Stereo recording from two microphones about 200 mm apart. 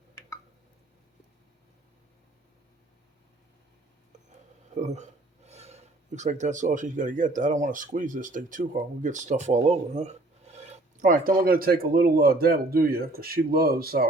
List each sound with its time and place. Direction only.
4.7 s speech: 35° right (ahead or behind)